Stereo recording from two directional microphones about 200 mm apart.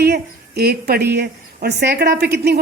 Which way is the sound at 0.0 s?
55° right (ahead or behind).